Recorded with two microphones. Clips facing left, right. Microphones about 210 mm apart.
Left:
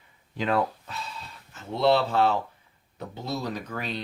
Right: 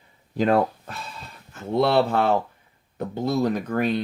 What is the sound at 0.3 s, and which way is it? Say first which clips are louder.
Speech: right 6 dB; 45° right (ahead or behind).